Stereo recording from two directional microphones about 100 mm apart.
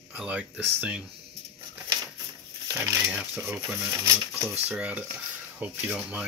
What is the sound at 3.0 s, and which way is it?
Speech, 15° right (ahead or behind).